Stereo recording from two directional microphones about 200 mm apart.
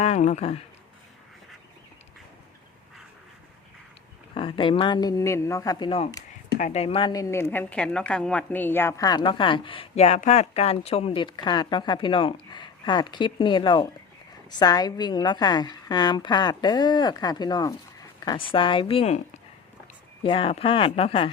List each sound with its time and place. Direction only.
0.0 s speech: 35° left (ahead or behind)
4.4 s a woman's voice: 25° left (ahead or behind)
20.2 s a woman's voice: 25° left (ahead or behind)